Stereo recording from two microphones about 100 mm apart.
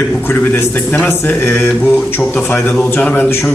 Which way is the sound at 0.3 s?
25° left (ahead or behind).